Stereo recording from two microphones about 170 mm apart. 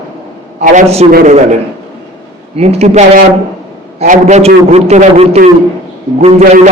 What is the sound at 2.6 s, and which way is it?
A man's voice, 40° right (ahead or behind).